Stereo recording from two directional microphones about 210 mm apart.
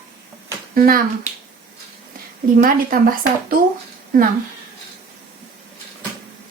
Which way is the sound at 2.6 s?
40° right (ahead or behind).